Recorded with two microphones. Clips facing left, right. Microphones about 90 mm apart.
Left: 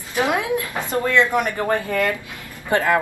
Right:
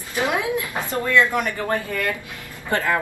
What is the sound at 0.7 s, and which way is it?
A woman's voice, 20° left (ahead or behind).